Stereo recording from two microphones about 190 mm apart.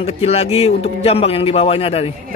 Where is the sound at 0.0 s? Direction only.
30° left (ahead or behind).